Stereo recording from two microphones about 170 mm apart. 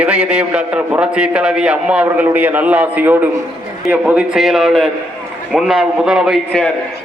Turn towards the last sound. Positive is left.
turn(degrees=0)  # may be behind; listen again after turning